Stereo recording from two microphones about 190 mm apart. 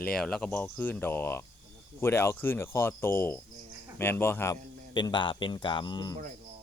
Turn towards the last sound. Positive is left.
turn(degrees=20)  # may be behind; listen again after turning